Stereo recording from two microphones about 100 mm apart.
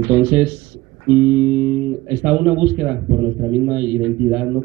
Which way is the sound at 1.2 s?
15° right (ahead or behind).